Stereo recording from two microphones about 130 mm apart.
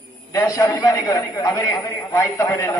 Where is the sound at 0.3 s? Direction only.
25° left (ahead or behind).